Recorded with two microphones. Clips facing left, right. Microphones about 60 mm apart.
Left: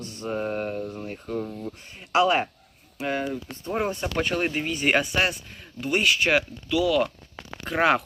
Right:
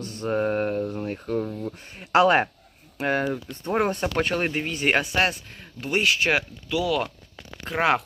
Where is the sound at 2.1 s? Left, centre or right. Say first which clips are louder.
Right 3 dB; right.